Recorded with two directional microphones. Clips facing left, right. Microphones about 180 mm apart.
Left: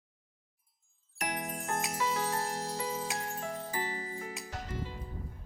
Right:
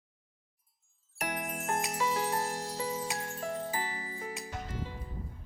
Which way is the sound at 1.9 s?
20° right (ahead or behind).